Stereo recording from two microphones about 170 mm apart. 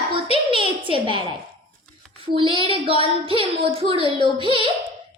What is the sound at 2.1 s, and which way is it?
Speech, 30° right (ahead or behind).